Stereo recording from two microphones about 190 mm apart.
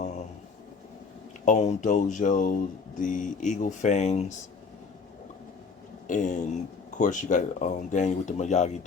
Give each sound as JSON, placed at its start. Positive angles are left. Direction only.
{"t": 1.5, "sound": "speech", "side_deg": 40}
{"t": 6.1, "sound": "speech", "side_deg": 40}